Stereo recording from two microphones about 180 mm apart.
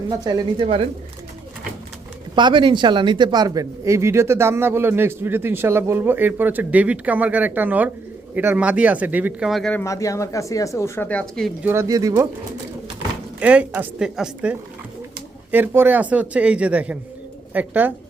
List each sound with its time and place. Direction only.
0.1 s speech: 20° right (ahead or behind)
2.3 s speech: 25° right (ahead or behind); by 9.8 s 5° left (ahead or behind)
9.8 s speech: 15° left (ahead or behind)
11.6 s speech: 15° right (ahead or behind)
13.4 s speech: 5° right (ahead or behind)